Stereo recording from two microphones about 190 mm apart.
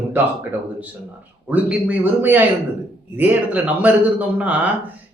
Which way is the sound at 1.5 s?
5° right (ahead or behind).